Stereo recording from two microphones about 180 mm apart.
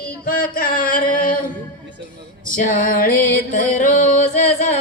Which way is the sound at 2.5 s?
50° left (ahead or behind).